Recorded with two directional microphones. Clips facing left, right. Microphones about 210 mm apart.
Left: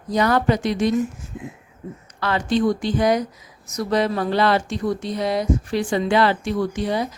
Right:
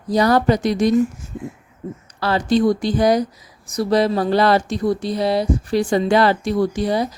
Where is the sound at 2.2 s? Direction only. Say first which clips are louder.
Right 3 dB; 35° right (ahead or behind).